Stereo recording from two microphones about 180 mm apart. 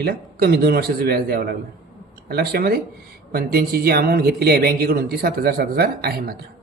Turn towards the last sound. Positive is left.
turn(degrees=-60)  # may be behind; listen again after turning